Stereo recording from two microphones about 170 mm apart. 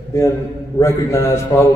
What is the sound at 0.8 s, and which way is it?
Speech, 20° left (ahead or behind).